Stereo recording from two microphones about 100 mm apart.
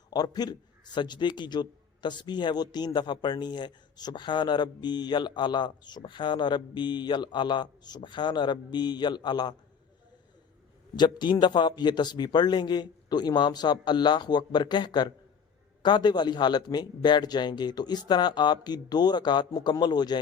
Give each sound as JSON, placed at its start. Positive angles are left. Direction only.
{"t": 0.1, "sound": "a man's voice", "side_deg": 45}
{"t": 10.9, "sound": "speech", "side_deg": 45}